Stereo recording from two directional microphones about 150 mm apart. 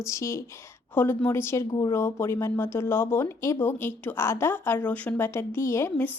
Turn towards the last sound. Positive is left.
turn(degrees=20)  # may be behind; listen again after turning